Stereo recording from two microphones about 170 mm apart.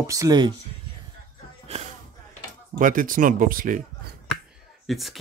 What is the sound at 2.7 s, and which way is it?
Speech, 50° right (ahead or behind).